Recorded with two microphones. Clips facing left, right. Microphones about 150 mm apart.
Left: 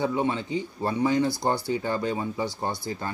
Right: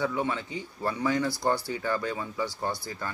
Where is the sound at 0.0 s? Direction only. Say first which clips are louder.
Left 3 dB; 25° left (ahead or behind).